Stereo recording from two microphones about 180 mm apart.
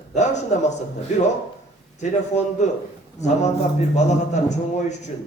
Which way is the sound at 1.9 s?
40° left (ahead or behind).